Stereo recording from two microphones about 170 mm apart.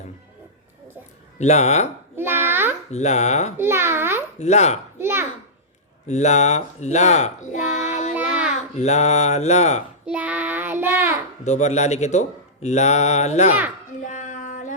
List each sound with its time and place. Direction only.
1.4 s speech: 40° left (ahead or behind)
2.1 s a sound: 15° right (ahead or behind)
2.9 s speech: 40° left (ahead or behind)
3.6 s a child's voice: 15° right (ahead or behind)
4.4 s speech: 40° left (ahead or behind)
4.9 s a child's voice: 15° right (ahead or behind)
6.1 s speech: 40° left (ahead or behind)
8.1 s child singing: 5° right (ahead or behind)
8.8 s speech: 40° left (ahead or behind)
10.1 s child singing: 10° right (ahead or behind)
11.4 s a man's voice: 45° left (ahead or behind)
14.0 s a sound: 50° left (ahead or behind)